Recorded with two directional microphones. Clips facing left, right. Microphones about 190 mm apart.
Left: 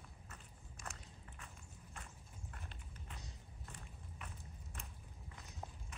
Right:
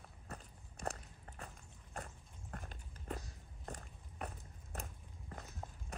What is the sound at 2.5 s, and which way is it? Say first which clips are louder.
Clip-clop: right 9 dB; 45° right (ahead or behind).